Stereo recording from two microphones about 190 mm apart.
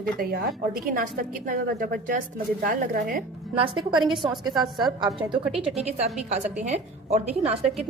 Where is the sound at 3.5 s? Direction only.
25° right (ahead or behind).